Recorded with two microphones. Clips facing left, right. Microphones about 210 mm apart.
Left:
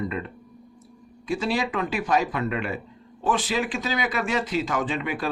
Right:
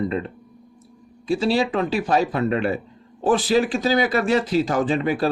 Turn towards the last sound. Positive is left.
turn(degrees=-35)  # may be behind; listen again after turning